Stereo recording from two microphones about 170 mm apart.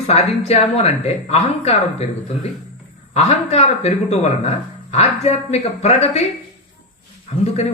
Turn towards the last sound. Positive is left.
turn(degrees=40)  # may be behind; listen again after turning